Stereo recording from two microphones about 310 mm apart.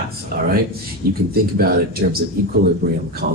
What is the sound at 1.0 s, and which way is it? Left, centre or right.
Speech, right.